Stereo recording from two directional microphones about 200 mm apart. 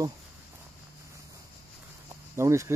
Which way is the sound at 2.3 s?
15° right (ahead or behind).